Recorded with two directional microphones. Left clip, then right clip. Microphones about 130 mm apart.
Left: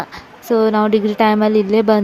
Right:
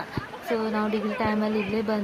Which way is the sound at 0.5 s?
90° left.